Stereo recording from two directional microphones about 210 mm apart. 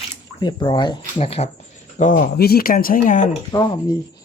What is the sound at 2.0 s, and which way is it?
Speech, 40° left (ahead or behind).